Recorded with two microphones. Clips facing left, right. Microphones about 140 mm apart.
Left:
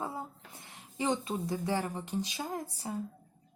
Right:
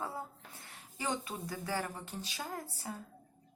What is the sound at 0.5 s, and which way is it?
A woman's voice, 15° left (ahead or behind).